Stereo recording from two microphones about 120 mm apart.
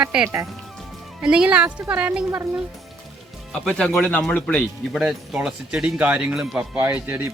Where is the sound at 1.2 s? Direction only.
5° right (ahead or behind).